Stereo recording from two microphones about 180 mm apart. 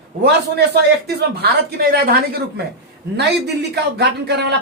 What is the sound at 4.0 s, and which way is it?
Speech, 70° right (ahead or behind).